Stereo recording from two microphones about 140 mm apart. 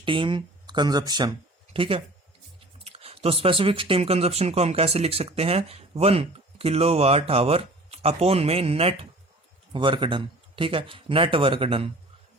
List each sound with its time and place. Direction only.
0.0 s speech: 35° right (ahead or behind)
1.7 s speech: 40° right (ahead or behind)